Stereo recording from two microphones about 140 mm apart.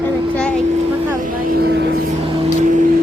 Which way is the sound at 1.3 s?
85° right.